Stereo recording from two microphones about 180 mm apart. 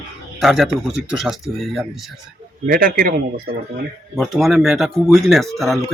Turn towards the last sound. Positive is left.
turn(degrees=0)  # may be behind; listen again after turning